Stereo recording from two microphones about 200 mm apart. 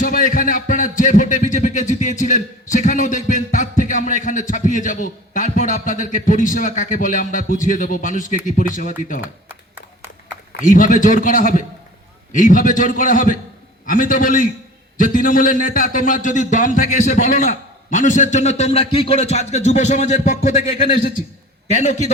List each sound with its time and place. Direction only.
0.0 s a man's voice: 45° left (ahead or behind)
10.7 s a man's voice: 40° left (ahead or behind)